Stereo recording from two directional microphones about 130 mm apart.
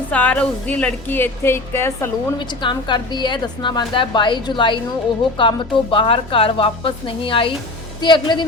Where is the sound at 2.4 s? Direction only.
35° left (ahead or behind).